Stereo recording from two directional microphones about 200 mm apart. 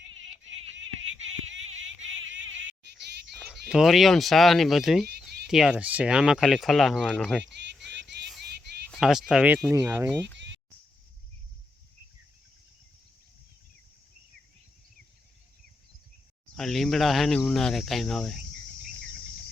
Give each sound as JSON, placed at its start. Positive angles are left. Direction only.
{"t": 0.8, "sound": "a sound", "side_deg": -70}
{"t": 3.4, "sound": "speech", "side_deg": 0}
{"t": 8.9, "sound": "speech", "side_deg": 0}
{"t": 9.7, "sound": "speech", "side_deg": -15}
{"t": 10.3, "sound": "a sound", "side_deg": -60}
{"t": 16.6, "sound": "speech", "side_deg": 0}